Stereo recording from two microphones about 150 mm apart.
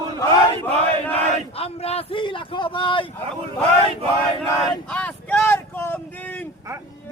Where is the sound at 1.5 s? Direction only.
40° left (ahead or behind).